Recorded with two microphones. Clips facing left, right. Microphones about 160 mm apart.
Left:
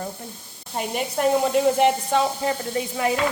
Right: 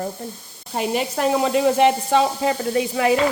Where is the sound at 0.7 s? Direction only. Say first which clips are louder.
Right 3 dB; 90° right.